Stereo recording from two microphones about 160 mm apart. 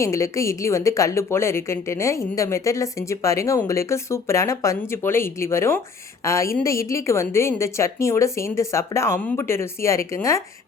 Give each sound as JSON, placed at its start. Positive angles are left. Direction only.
{"t": 0.0, "sound": "a woman's voice", "side_deg": 20}